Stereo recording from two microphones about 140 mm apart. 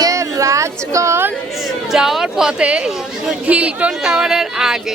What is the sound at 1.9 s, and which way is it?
Speech, 5° right (ahead or behind).